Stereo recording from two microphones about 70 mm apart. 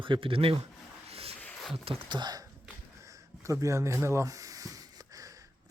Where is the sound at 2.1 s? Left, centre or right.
Right.